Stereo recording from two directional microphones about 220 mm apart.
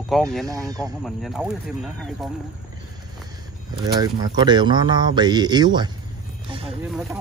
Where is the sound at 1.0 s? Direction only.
Centre (ahead or behind).